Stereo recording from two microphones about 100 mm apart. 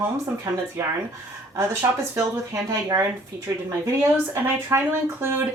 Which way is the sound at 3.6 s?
25° right (ahead or behind).